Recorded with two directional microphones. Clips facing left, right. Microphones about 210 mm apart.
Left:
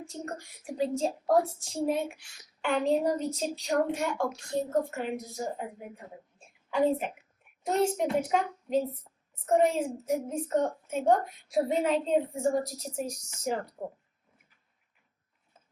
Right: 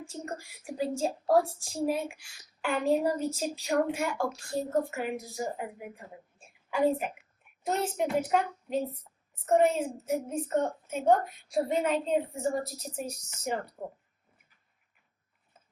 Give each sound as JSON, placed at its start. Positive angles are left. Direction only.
{"t": 0.1, "sound": "a woman's voice", "side_deg": -5}
{"t": 6.7, "sound": "a woman's voice", "side_deg": -5}